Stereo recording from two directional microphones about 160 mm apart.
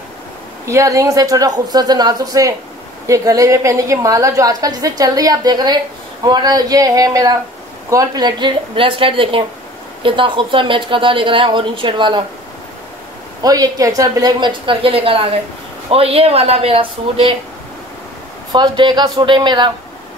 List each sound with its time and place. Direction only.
0.7 s a woman's voice: 20° right (ahead or behind)
13.4 s a woman's voice: 20° right (ahead or behind)
18.5 s a woman's voice: 30° right (ahead or behind)